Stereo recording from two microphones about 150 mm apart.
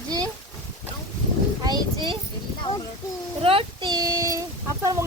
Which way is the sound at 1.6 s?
30° right (ahead or behind).